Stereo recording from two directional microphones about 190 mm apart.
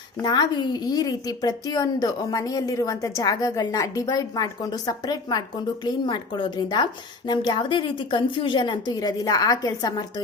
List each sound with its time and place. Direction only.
0.2 s a woman's voice: 20° left (ahead or behind)